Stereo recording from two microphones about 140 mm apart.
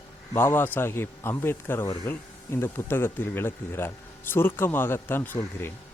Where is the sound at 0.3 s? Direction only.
15° left (ahead or behind).